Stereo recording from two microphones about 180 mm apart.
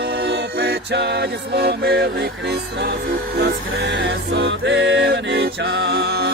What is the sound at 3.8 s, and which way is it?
Music, 85° right.